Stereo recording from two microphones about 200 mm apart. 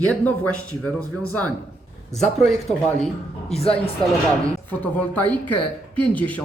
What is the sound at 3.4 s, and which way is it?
Speech, 30° left (ahead or behind).